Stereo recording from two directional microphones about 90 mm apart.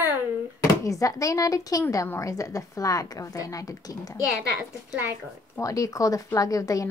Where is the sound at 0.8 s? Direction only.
40° left (ahead or behind).